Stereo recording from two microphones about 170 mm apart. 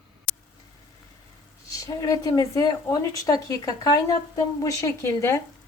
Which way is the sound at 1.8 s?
20° left (ahead or behind).